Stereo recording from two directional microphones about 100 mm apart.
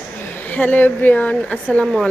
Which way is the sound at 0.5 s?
20° left (ahead or behind).